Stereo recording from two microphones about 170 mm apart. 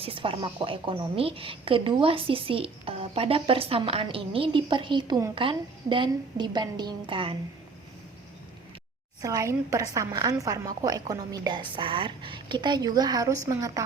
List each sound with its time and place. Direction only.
0.0 s a woman's voice: 30° right (ahead or behind)
9.2 s a woman's voice: 20° right (ahead or behind)